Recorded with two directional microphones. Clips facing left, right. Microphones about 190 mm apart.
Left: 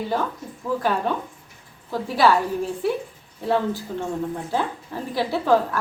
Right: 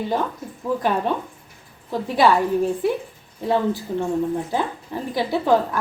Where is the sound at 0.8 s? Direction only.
20° right (ahead or behind).